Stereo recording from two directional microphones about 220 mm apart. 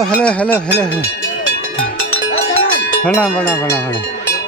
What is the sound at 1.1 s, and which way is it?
Music, 60° left (ahead or behind).